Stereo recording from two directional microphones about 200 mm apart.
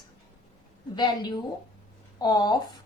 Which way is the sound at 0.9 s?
20° left (ahead or behind).